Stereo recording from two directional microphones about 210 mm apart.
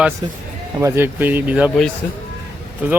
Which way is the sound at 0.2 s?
20° right (ahead or behind).